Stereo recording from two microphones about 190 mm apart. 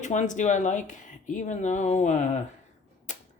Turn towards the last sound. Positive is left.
turn(degrees=40)  # may be behind; listen again after turning